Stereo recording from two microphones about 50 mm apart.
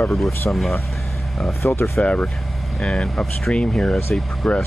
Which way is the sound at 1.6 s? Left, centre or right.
Left.